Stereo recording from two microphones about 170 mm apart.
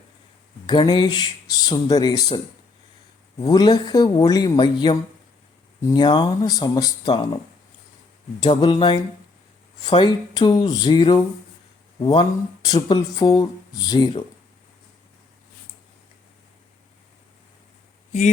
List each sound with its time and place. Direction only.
0.7 s speech: 25° left (ahead or behind)
3.5 s speech: 25° left (ahead or behind)
8.4 s speech: 25° left (ahead or behind)